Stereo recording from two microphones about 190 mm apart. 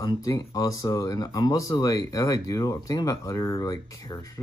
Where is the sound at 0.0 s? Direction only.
20° left (ahead or behind).